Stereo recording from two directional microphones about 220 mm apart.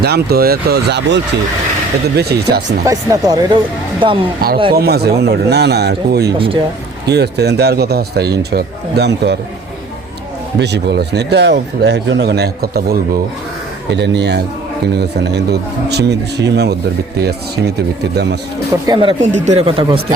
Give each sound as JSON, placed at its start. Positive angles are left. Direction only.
{"t": 0.0, "sound": "speech", "side_deg": -45}
{"t": 2.8, "sound": "speech", "side_deg": -15}
{"t": 4.7, "sound": "speech", "side_deg": -45}
{"t": 6.2, "sound": "speech", "side_deg": -25}
{"t": 7.1, "sound": "speech", "side_deg": -50}
{"t": 10.6, "sound": "speech", "side_deg": -50}
{"t": 18.9, "sound": "speech", "side_deg": -25}